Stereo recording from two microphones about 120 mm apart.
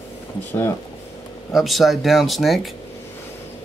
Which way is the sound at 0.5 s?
20° left (ahead or behind).